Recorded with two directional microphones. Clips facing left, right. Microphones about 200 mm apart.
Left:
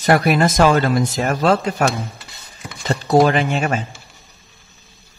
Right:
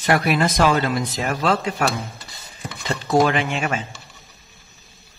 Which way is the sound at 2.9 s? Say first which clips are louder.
Left 4 dB; 40° left (ahead or behind).